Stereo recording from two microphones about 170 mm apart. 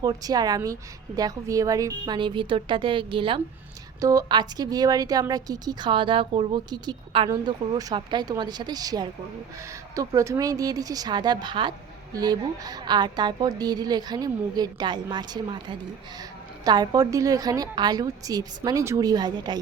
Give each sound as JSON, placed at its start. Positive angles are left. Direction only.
{"t": 0.0, "sound": "a woman's voice", "side_deg": -20}